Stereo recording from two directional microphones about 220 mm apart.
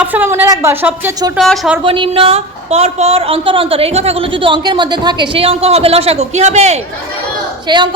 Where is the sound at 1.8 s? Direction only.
25° right (ahead or behind).